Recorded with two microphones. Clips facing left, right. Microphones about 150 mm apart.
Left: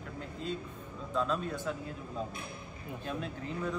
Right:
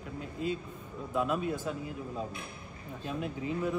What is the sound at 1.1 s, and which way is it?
Speech, 15° right (ahead or behind).